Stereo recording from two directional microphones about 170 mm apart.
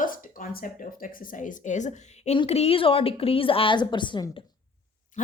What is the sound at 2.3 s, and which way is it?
Speech, 35° left (ahead or behind).